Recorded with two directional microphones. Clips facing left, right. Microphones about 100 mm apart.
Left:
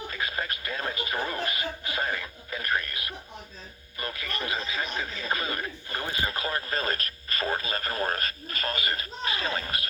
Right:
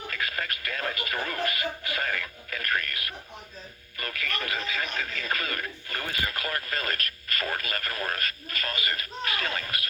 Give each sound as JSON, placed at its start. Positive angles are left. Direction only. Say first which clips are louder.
{"t": 0.1, "sound": "speech", "louder": "right 1 dB", "side_deg": 25}